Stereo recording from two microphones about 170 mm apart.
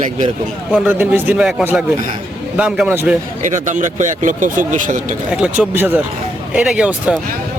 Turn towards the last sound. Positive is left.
turn(degrees=-5)  # may be behind; listen again after turning